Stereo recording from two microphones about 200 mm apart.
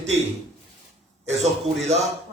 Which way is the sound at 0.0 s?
35° right (ahead or behind).